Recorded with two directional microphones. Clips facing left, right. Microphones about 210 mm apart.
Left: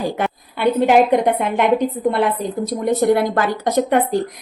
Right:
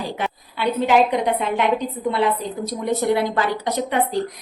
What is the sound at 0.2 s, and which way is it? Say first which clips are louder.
A woman's voice: left 5 dB; 55° left (ahead or behind).